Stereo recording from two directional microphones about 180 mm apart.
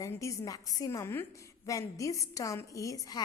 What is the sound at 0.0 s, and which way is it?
A woman's voice, 15° left (ahead or behind).